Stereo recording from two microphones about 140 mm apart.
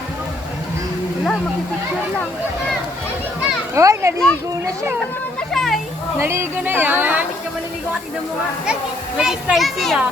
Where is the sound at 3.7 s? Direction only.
20° right (ahead or behind).